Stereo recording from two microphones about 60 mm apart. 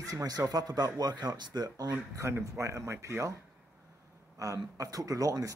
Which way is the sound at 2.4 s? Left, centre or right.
Right.